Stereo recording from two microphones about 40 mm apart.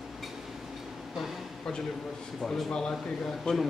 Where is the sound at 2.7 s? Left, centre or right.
Centre.